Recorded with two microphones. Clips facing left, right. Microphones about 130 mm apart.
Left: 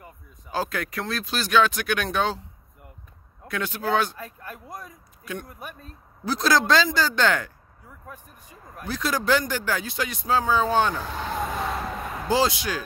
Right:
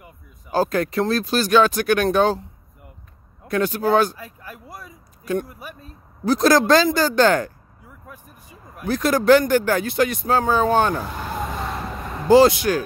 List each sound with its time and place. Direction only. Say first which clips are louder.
0.5 s speech: right 8 dB; 40° right (ahead or behind)
3.4 s speech: right 7 dB; 40° right (ahead or behind)
4.2 s speech: even; 5° right (ahead or behind)
6.2 s speech: right 6 dB; 50° right (ahead or behind)
8.5 s a sound: even; 10° right (ahead or behind)
8.8 s speech: right 9 dB; 50° right (ahead or behind)
11.1 s a sound: right 1 dB; 5° right (ahead or behind)
12.3 s speech: right 10 dB; 55° right (ahead or behind)